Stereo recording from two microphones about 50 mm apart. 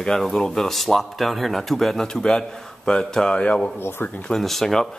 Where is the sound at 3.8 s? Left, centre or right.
Left.